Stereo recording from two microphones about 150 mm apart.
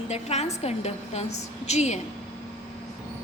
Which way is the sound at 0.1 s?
45° left (ahead or behind).